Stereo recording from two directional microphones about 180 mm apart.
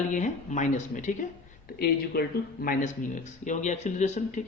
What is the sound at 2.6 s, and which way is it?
Speech, 45° left (ahead or behind).